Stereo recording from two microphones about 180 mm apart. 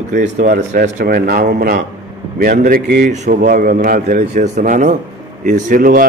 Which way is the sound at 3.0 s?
45° right (ahead or behind).